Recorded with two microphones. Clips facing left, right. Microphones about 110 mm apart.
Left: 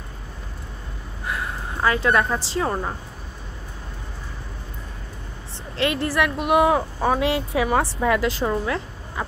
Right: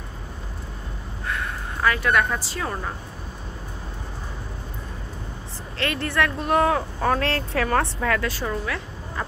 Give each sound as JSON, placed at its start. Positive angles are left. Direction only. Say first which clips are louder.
{"t": 1.2, "sound": "a woman's voice", "louder": "left 1 dB", "side_deg": 25}
{"t": 5.8, "sound": "a woman's voice", "louder": "left 4 dB", "side_deg": 25}
{"t": 6.1, "sound": "speech", "louder": "left 1 dB", "side_deg": 10}
{"t": 8.0, "sound": "a woman's voice", "louder": "left 4 dB", "side_deg": 20}